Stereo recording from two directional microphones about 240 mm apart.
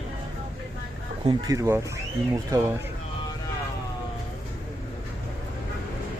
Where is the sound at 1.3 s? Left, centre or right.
Centre.